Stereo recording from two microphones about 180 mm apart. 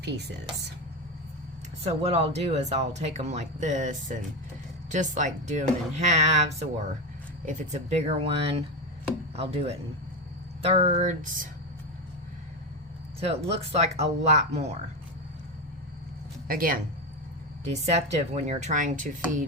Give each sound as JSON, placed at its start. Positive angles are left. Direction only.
{"t": 1.8, "sound": "speech", "side_deg": -35}
{"t": 13.1, "sound": "speech", "side_deg": -35}
{"t": 16.5, "sound": "speech", "side_deg": -50}
{"t": 17.8, "sound": "speech", "side_deg": -40}